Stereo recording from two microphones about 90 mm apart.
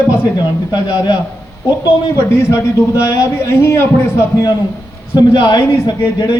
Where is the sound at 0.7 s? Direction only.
50° left (ahead or behind).